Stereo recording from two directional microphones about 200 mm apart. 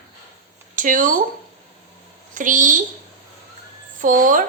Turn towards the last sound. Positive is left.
turn(degrees=-45)  # may be behind; listen again after turning